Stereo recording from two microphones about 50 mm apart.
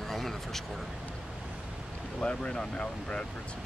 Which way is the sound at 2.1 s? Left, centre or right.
Centre.